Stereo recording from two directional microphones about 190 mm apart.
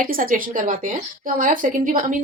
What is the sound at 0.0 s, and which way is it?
Speech, 50° right (ahead or behind).